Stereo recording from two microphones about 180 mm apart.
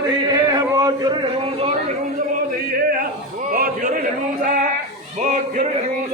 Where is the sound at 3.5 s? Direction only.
50° right (ahead or behind).